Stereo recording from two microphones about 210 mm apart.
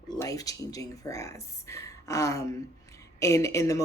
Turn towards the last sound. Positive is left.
turn(degrees=15)  # may be behind; listen again after turning